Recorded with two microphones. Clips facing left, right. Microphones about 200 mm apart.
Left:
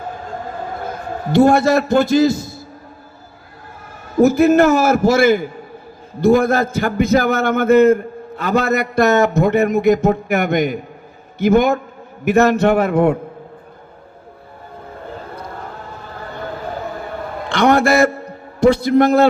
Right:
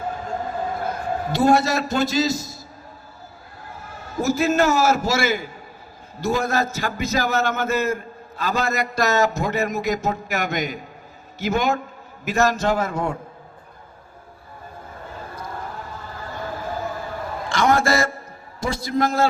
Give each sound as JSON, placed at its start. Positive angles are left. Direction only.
{"t": 1.3, "sound": "a man's voice", "side_deg": 55}
{"t": 4.2, "sound": "a man's voice", "side_deg": 55}
{"t": 17.5, "sound": "a man's voice", "side_deg": 60}